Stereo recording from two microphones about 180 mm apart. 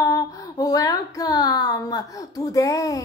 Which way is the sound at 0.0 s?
20° left (ahead or behind).